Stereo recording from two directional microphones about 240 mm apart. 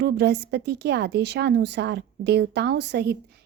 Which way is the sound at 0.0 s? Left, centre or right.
Right.